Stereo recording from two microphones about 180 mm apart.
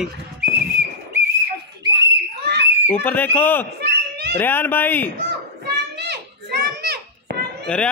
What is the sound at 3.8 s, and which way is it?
Children playing, 70° right (ahead or behind).